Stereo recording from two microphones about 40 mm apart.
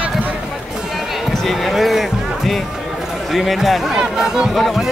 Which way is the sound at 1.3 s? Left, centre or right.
Centre.